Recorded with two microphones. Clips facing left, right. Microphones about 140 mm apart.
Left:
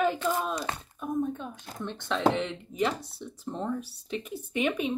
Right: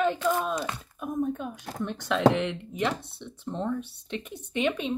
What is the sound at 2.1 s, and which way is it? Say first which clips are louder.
Speech: right 3 dB; centre (ahead or behind).